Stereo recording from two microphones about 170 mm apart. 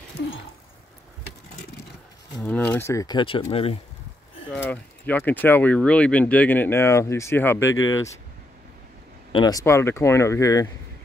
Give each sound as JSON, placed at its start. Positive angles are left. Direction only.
{"t": 2.4, "sound": "speech", "side_deg": 10}
{"t": 4.6, "sound": "speech", "side_deg": 10}
{"t": 9.3, "sound": "speech", "side_deg": 25}